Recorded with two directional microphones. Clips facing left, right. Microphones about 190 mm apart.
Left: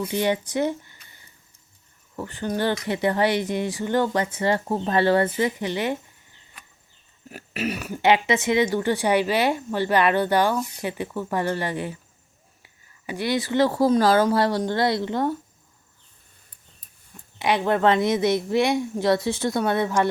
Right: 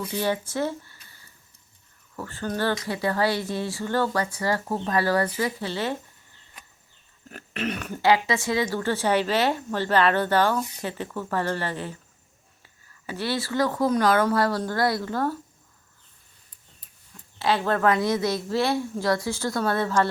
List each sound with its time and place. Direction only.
0.1 s speech: 20° left (ahead or behind)
7.3 s a sound: 5° left (ahead or behind)
8.0 s speech: 20° left (ahead or behind)
17.3 s speech: 15° left (ahead or behind)